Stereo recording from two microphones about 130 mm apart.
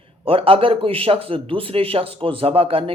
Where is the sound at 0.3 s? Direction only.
45° right (ahead or behind).